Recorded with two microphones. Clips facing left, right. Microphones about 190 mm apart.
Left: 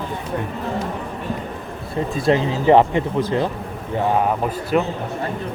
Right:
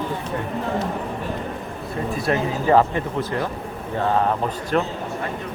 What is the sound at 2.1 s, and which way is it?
A man's voice, 20° left (ahead or behind).